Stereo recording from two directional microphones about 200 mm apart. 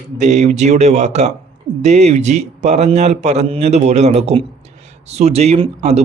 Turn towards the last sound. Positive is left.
turn(degrees=-30)  # may be behind; listen again after turning